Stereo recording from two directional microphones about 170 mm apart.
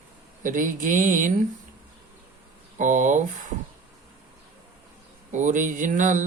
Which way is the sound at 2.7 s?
50° right (ahead or behind).